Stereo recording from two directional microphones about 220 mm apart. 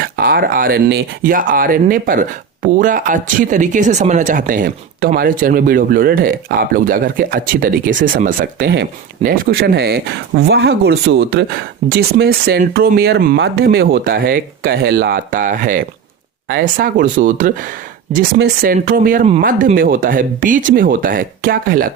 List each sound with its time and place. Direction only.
0.0 s speech: 45° right (ahead or behind)